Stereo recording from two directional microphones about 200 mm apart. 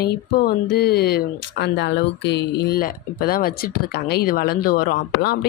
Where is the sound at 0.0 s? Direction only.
50° left (ahead or behind).